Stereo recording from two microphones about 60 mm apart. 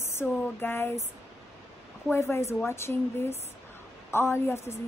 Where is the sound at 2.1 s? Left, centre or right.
Left.